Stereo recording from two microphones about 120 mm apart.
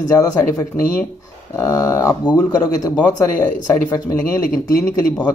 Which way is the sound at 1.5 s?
25° left (ahead or behind).